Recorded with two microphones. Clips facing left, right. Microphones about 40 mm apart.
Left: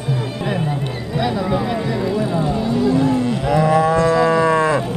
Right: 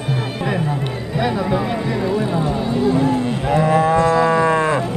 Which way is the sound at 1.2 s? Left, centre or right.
Centre.